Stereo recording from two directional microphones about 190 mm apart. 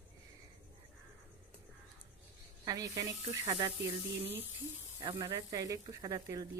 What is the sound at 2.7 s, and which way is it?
Speech, 20° right (ahead or behind).